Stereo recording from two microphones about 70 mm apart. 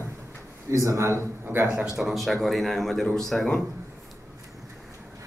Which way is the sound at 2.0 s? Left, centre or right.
Centre.